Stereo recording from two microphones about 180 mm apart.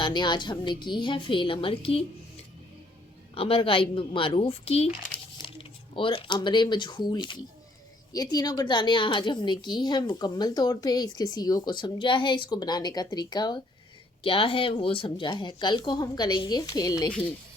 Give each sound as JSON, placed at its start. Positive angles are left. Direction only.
{"t": 0.0, "sound": "a woman's voice", "side_deg": 25}
{"t": 3.3, "sound": "a woman's voice", "side_deg": 30}